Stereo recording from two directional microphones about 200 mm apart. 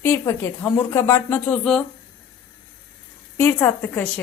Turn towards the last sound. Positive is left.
turn(degrees=10)  # may be behind; listen again after turning